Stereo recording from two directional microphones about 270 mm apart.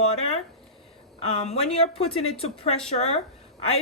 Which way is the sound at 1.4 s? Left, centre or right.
Left.